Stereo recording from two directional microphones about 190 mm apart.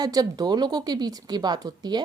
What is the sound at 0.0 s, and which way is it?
A woman's voice, 20° right (ahead or behind).